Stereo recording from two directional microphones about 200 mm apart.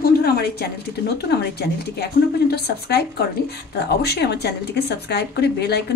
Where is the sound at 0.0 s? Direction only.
50° left (ahead or behind).